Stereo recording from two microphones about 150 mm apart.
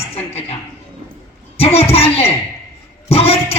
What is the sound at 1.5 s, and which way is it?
Speech, 40° left (ahead or behind).